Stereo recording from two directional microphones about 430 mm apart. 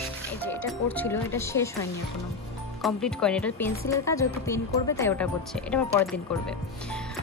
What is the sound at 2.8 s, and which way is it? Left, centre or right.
Speech, centre.